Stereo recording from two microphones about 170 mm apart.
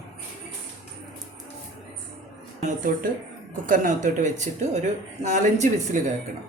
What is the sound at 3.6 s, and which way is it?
Speech, 50° right (ahead or behind).